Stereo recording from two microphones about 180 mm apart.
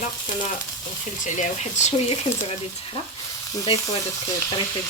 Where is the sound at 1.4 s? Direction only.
40° left (ahead or behind).